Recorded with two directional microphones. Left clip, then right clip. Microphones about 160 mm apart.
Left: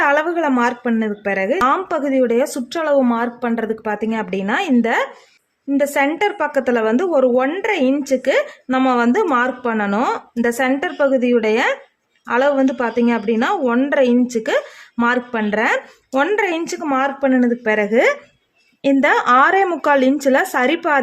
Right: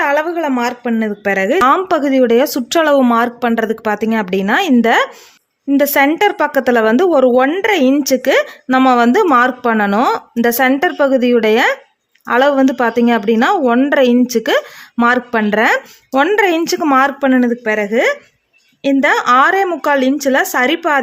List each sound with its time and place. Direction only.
0.0 s a sound: 5° right (ahead or behind)
0.9 s a woman's voice: 25° right (ahead or behind)
17.4 s a woman's voice: 10° right (ahead or behind)